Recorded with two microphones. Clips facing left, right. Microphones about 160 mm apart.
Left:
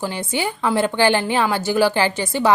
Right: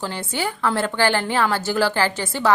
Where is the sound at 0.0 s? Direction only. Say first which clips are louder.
Left 2 dB; 15° left (ahead or behind).